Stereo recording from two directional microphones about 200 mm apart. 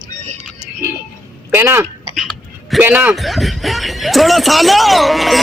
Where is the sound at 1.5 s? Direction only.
15° right (ahead or behind).